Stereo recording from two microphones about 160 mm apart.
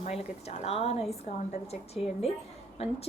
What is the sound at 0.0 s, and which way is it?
A woman's voice, 40° left (ahead or behind).